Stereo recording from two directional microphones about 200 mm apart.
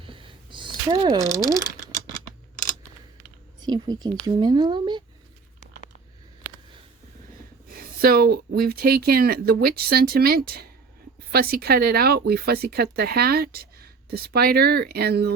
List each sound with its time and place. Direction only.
0.0 s a sound: 25° right (ahead or behind)
3.6 s speech: 20° right (ahead or behind)
7.7 s speech: 45° right (ahead or behind)